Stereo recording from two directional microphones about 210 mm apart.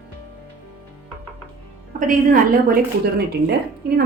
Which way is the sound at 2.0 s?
40° right (ahead or behind).